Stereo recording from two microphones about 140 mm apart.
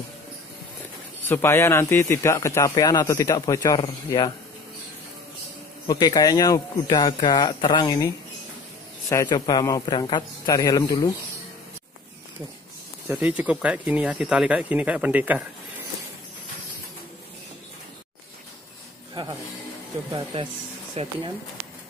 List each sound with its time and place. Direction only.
1.3 s speech: 15° left (ahead or behind)
5.9 s speech: 25° left (ahead or behind)
9.1 s speech: 20° left (ahead or behind)
13.1 s speech: 10° right (ahead or behind)
20.9 s speech: 45° right (ahead or behind)